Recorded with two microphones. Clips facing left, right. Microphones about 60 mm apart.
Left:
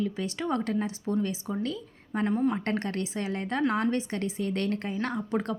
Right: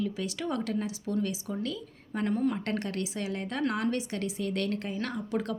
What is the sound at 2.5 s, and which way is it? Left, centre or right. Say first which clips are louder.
A woman's voice: left 2 dB; left.